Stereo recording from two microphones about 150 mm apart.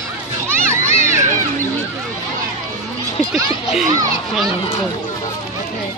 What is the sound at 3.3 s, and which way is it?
Speech, centre (ahead or behind).